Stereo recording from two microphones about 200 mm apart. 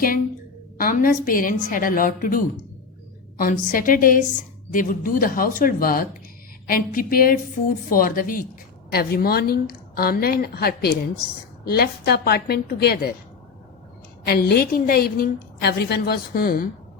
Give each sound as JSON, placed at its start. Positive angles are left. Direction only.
{"t": 0.8, "sound": "a woman's voice", "side_deg": 45}
{"t": 14.3, "sound": "a woman's voice", "side_deg": 50}